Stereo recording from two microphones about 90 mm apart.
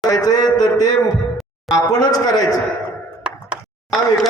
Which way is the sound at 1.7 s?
40° left (ahead or behind).